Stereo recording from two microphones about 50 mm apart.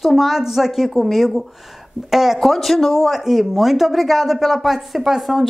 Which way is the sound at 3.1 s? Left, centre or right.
Centre.